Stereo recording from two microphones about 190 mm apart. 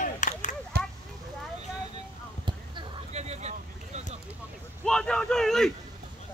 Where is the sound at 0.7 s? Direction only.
55° right (ahead or behind).